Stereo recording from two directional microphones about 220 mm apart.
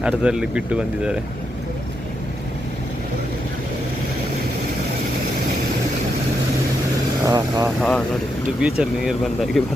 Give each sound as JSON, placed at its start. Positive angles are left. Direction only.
{"t": 0.0, "sound": "speech", "side_deg": -5}
{"t": 7.3, "sound": "speech", "side_deg": -15}
{"t": 7.8, "sound": "speech", "side_deg": 5}